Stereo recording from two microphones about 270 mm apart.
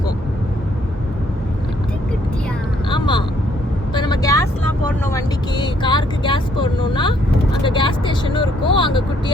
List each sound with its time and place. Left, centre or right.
2.9 s vehicle: centre
5.1 s speech: centre